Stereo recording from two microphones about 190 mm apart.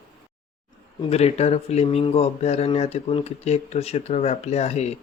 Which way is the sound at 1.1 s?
35° left (ahead or behind).